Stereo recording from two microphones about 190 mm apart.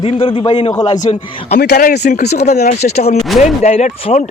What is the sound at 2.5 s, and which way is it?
Speech, 35° left (ahead or behind).